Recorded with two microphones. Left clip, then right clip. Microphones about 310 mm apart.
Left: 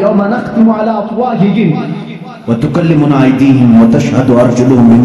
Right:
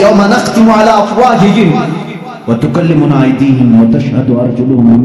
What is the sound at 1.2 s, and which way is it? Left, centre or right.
Speech, right.